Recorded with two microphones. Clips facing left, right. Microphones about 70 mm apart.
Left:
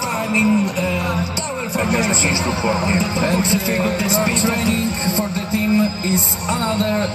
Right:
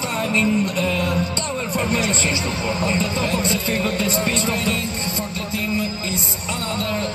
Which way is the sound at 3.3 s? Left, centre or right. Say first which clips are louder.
Left 3 dB; left.